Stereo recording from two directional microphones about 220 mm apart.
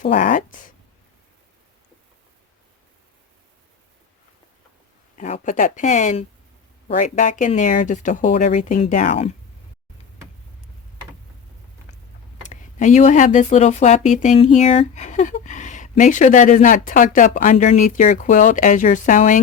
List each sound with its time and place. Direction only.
0.0 s speech: 35° left (ahead or behind)
5.1 s speech: 35° left (ahead or behind)
12.5 s speech: 30° left (ahead or behind)